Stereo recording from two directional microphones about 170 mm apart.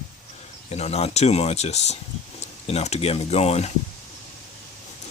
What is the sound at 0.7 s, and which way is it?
Speech, 40° left (ahead or behind).